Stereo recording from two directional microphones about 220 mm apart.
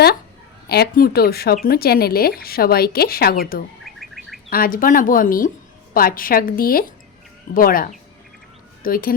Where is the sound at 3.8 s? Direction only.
Centre (ahead or behind).